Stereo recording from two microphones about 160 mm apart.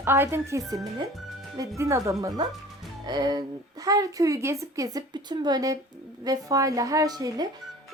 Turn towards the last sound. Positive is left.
turn(degrees=-25)  # may be behind; listen again after turning